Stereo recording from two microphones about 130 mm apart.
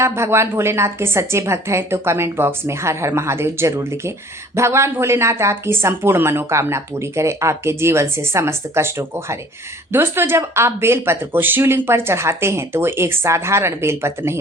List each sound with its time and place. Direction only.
0.0 s speech: 20° right (ahead or behind)